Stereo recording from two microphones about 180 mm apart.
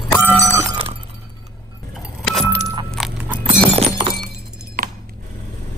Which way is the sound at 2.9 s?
5° right (ahead or behind).